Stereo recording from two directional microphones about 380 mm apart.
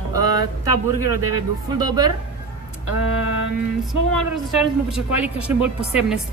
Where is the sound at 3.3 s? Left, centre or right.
Right.